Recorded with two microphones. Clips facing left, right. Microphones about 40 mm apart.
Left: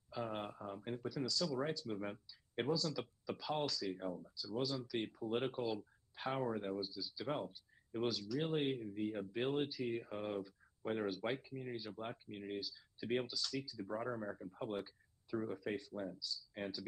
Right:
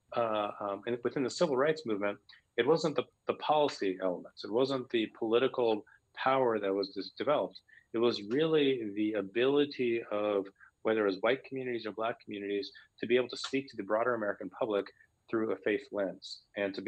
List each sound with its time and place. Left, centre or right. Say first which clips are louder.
0.1 s speech: right 11 dB; right